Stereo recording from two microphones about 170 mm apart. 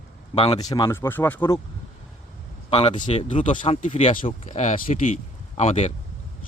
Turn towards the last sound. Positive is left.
turn(degrees=40)  # may be behind; listen again after turning